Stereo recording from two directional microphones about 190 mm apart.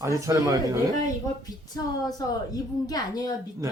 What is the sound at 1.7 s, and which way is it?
A woman's voice, 20° left (ahead or behind).